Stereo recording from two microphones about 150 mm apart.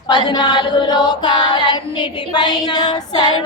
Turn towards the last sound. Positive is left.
turn(degrees=30)  # may be behind; listen again after turning